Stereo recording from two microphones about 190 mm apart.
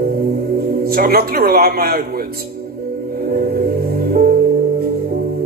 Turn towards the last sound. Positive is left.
turn(degrees=-55)  # may be behind; listen again after turning